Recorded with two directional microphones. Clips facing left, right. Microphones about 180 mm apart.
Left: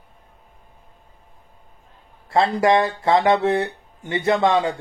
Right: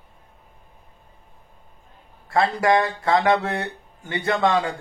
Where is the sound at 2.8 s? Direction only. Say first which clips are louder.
Left 2 dB; 20° left (ahead or behind).